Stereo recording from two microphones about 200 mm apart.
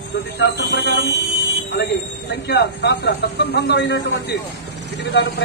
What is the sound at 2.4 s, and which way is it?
A man's voice, 55° left (ahead or behind).